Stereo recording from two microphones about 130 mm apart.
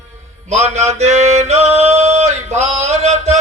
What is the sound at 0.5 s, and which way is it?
Music, 60° right (ahead or behind).